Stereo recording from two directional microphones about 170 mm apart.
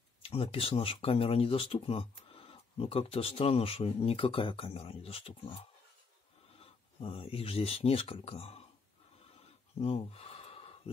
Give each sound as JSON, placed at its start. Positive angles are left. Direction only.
{"t": 0.2, "sound": "speech", "side_deg": 35}
{"t": 6.6, "sound": "speech", "side_deg": 35}
{"t": 9.8, "sound": "gasp", "side_deg": 35}